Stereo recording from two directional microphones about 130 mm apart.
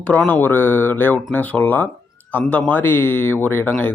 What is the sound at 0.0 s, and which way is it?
Speech, 10° left (ahead or behind).